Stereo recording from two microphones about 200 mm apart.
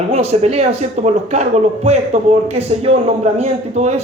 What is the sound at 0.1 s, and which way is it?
Speech, 30° right (ahead or behind).